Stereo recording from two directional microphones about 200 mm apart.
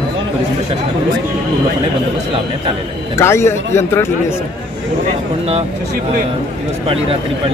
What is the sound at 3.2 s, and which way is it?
Speech, 15° left (ahead or behind).